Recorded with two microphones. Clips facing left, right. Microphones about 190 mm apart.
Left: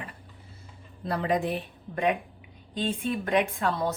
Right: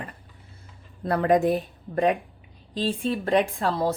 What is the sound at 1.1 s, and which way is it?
A woman's voice, 50° right (ahead or behind).